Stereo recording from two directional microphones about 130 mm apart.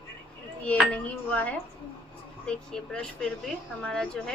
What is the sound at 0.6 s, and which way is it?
A woman's voice, 10° left (ahead or behind).